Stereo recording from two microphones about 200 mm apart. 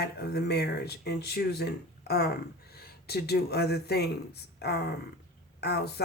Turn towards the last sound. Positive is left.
turn(degrees=55)  # may be behind; listen again after turning